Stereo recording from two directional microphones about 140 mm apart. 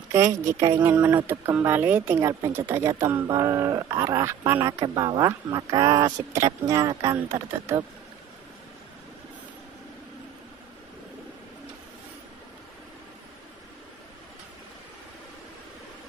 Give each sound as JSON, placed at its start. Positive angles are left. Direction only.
{"t": 0.1, "sound": "a woman's voice", "side_deg": -20}